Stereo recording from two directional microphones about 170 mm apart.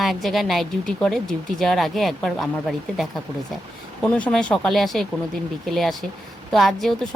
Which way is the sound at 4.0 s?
5° left (ahead or behind).